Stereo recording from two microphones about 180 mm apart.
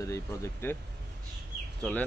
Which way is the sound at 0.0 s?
15° left (ahead or behind).